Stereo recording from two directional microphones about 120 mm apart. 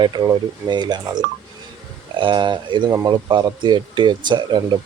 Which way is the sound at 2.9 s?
25° right (ahead or behind).